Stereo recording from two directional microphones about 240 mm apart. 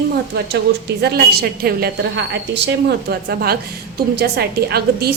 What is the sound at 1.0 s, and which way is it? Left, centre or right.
A woman's voice, right.